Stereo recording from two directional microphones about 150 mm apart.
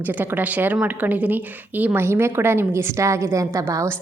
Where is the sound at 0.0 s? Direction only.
10° right (ahead or behind).